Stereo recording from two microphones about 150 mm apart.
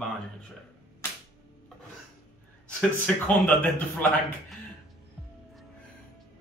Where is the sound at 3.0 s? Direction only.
10° left (ahead or behind).